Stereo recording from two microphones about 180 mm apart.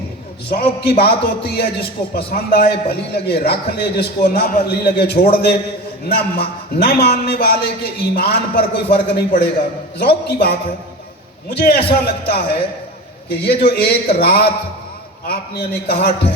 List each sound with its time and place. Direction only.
0.5 s a man's voice: 60° left (ahead or behind)